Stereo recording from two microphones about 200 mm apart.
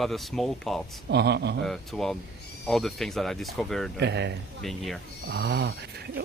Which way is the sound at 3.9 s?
60° right (ahead or behind).